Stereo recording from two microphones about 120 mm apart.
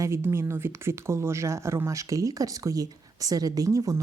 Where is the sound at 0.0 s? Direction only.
20° right (ahead or behind).